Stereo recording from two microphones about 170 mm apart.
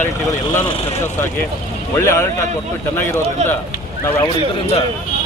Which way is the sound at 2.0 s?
15° left (ahead or behind).